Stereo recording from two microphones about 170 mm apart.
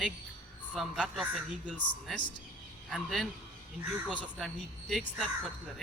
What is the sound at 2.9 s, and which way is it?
Speech, centre (ahead or behind).